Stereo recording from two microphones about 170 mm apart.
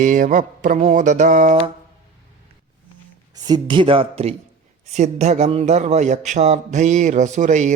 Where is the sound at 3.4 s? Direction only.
25° right (ahead or behind).